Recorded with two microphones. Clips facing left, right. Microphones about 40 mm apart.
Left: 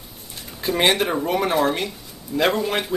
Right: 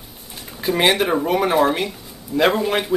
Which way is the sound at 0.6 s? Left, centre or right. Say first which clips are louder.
Right 2 dB; centre.